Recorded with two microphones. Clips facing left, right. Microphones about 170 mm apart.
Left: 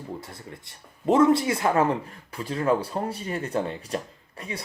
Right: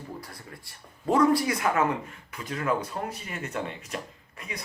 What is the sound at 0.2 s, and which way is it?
Speech, 25° left (ahead or behind).